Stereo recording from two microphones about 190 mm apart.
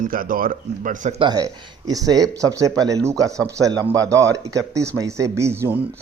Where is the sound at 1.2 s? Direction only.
20° right (ahead or behind).